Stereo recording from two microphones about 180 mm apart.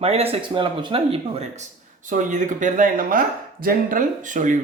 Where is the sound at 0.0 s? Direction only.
35° right (ahead or behind).